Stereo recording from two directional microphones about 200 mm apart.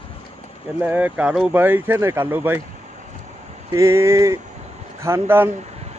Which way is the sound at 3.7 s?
15° right (ahead or behind).